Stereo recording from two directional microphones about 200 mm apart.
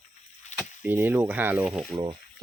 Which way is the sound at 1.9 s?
25° right (ahead or behind).